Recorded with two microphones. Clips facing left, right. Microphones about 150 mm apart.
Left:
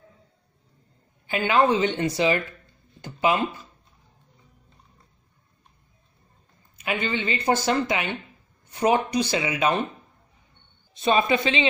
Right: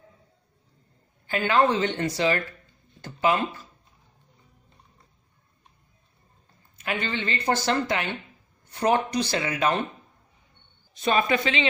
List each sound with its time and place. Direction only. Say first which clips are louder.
1.2 s speech: left 1 dB; 15° left (ahead or behind)
3.0 s a sound: left 1 dB; 15° left (ahead or behind)
6.8 s speech: left 2 dB; 15° left (ahead or behind)
11.0 s speech: left 2 dB; 20° left (ahead or behind)